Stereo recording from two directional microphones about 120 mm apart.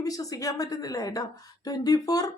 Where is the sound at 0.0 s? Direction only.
30° left (ahead or behind).